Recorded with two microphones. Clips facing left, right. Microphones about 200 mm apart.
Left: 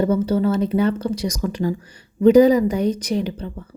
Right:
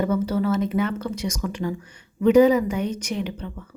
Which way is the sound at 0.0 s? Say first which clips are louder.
Left 4 dB; 30° left (ahead or behind).